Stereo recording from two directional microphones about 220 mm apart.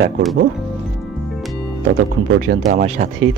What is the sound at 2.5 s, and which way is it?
Speech, 45° right (ahead or behind).